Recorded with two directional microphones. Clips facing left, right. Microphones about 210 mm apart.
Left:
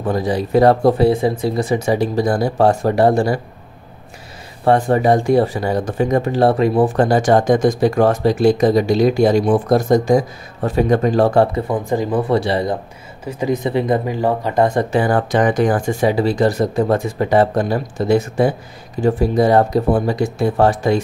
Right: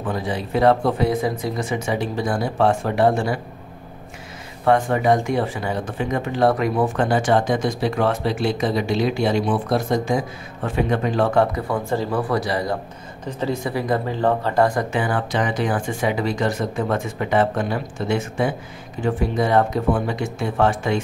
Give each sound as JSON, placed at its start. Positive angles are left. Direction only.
{"t": 0.0, "sound": "speech", "side_deg": 40}
{"t": 4.6, "sound": "speech", "side_deg": 35}
{"t": 11.6, "sound": "speech", "side_deg": 15}
{"t": 13.2, "sound": "speech", "side_deg": 10}